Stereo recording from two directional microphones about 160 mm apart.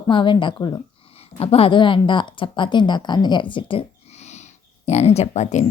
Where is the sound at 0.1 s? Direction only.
30° left (ahead or behind).